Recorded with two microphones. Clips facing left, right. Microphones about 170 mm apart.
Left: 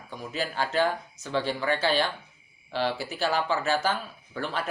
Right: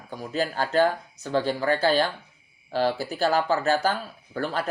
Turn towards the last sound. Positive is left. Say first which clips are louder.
# right 4 dB
turn(degrees=-40)  # may be behind; listen again after turning